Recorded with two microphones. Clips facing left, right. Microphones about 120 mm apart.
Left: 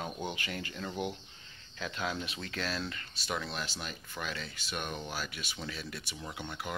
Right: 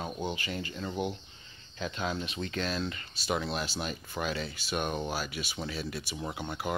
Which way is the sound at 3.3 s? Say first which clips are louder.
Right 5 dB; 25° right (ahead or behind).